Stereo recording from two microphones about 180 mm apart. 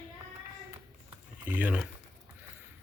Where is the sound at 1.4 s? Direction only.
10° right (ahead or behind).